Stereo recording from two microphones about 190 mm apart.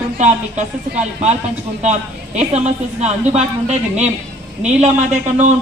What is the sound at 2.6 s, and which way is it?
A man's voice, 35° right (ahead or behind).